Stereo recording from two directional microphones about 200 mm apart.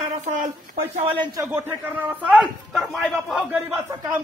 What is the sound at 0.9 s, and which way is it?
Speech, 25° right (ahead or behind).